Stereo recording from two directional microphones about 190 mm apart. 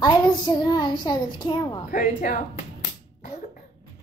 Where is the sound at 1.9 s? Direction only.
45° left (ahead or behind).